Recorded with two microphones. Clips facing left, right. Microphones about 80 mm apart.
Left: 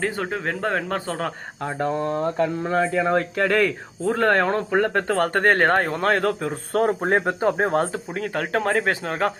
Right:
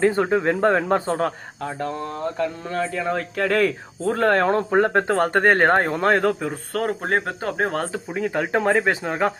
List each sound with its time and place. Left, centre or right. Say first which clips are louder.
0.1 s speech: right 6 dB; right
1.6 s speech: left 3 dB; centre
3.3 s speech: even; centre
4.7 s speech: right 2 dB; centre
6.7 s speech: left 3 dB; centre
7.6 s speech: left 2 dB; centre
8.1 s speech: right 5 dB; centre